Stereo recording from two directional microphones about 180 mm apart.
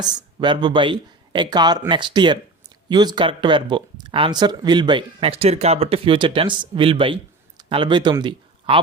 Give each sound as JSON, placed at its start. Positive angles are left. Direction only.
{"t": 0.0, "sound": "speech", "side_deg": -25}